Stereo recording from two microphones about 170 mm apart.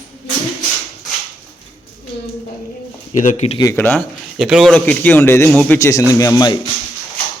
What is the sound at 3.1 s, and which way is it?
Speech, 45° left (ahead or behind).